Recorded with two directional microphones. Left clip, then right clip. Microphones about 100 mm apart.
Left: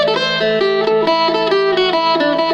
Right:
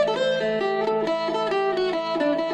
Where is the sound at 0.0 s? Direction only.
45° left (ahead or behind).